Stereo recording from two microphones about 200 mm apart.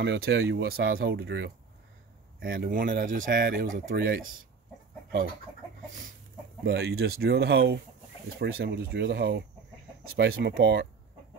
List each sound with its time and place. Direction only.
0.0 s speech: 60° right (ahead or behind)
3.7 s speech: 65° right (ahead or behind)
6.6 s speech: 55° right (ahead or behind)